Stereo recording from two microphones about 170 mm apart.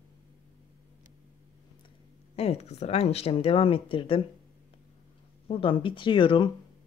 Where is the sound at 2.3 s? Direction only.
40° left (ahead or behind).